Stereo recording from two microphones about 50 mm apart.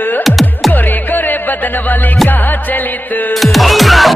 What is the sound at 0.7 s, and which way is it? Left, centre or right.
Music, left.